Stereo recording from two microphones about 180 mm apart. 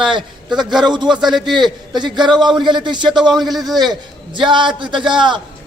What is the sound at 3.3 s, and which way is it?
Speech, centre (ahead or behind).